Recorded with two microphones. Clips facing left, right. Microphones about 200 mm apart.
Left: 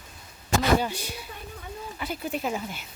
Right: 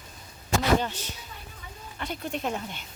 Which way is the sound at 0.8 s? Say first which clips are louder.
Left 2 dB; 10° left (ahead or behind).